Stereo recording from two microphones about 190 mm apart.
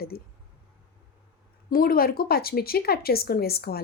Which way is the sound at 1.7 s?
50° left (ahead or behind).